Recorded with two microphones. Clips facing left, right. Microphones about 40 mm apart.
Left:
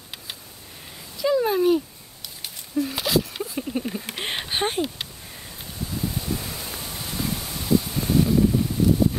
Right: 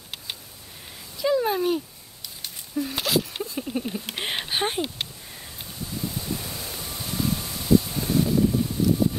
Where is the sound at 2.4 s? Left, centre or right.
Centre.